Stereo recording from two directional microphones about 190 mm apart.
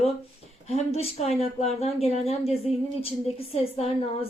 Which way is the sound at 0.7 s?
30° left (ahead or behind).